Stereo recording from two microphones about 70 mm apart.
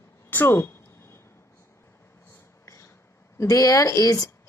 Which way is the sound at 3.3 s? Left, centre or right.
Left.